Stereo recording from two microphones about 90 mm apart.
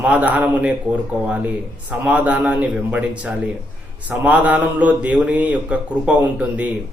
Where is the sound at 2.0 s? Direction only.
15° right (ahead or behind).